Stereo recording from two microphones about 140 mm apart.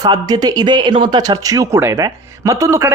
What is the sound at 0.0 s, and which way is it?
A woman's voice, 30° right (ahead or behind).